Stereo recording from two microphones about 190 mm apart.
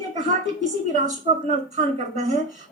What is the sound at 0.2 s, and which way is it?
A woman's voice, 40° right (ahead or behind).